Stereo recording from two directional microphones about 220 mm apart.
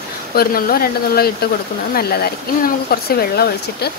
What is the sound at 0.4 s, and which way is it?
Speech, 40° left (ahead or behind).